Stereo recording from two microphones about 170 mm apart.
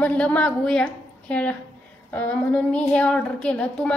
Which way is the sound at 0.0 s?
10° left (ahead or behind).